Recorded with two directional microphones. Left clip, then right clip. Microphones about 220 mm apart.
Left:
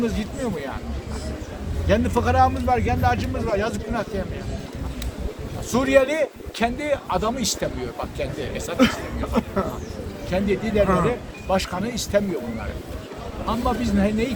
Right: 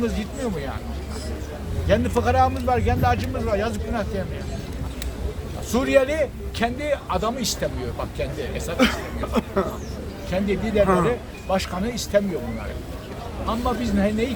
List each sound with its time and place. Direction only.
0.0 s speech: 5° left (ahead or behind)
1.9 s speech: centre (ahead or behind)
5.7 s speech: 5° left (ahead or behind)
8.8 s speech: 35° right (ahead or behind)
10.2 s speech: 5° left (ahead or behind)
10.8 s speech: 30° right (ahead or behind)
11.4 s speech: 5° left (ahead or behind)
13.5 s speech: 5° left (ahead or behind)